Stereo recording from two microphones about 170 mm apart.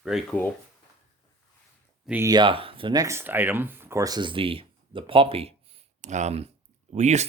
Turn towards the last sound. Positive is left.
turn(degrees=-40)  # may be behind; listen again after turning